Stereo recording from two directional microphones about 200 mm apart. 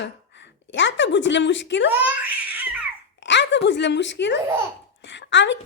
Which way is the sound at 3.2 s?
60° left (ahead or behind).